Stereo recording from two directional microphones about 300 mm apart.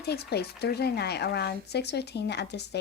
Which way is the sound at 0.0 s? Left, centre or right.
Left.